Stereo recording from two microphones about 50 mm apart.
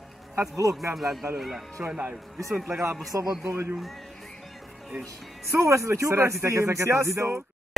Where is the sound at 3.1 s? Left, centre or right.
Right.